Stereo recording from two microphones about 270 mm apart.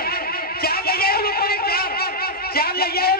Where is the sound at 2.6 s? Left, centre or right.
Left.